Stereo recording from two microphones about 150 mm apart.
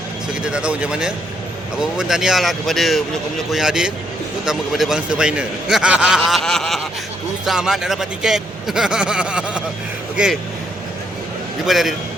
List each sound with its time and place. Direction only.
0.4 s a man's voice: 5° right (ahead or behind)
11.6 s a man's voice: centre (ahead or behind)